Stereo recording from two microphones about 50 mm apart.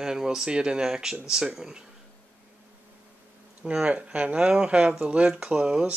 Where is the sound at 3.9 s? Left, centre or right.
Right.